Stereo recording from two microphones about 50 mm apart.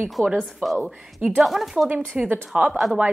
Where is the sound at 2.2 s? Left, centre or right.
Right.